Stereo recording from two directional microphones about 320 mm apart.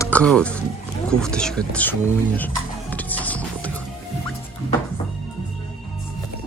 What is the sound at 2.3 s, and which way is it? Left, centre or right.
Music, centre.